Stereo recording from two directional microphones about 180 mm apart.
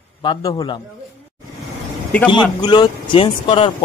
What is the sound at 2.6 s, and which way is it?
Speech, 25° left (ahead or behind).